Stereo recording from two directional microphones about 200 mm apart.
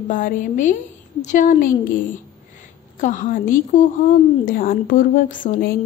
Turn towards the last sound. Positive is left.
turn(degrees=45)  # may be behind; listen again after turning